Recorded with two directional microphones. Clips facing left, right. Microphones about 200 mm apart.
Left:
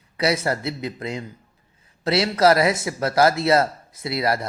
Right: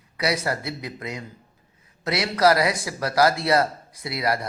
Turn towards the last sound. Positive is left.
turn(degrees=25)  # may be behind; listen again after turning